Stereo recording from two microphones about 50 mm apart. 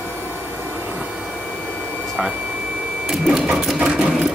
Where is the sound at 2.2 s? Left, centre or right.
Centre.